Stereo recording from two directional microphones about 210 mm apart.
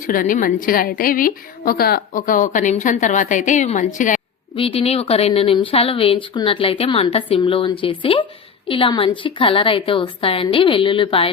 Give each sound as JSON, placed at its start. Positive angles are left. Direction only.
{"t": 0.0, "sound": "a woman's voice", "side_deg": 40}